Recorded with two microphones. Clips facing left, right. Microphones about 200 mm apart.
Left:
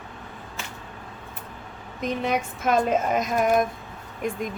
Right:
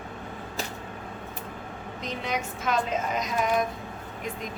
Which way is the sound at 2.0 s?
55° left (ahead or behind).